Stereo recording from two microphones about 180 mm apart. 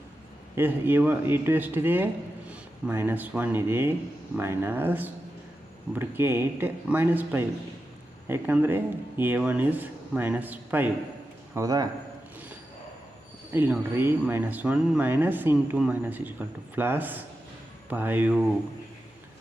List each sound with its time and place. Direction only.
0.5 s a man's voice: 10° right (ahead or behind)
13.5 s speech: 10° right (ahead or behind)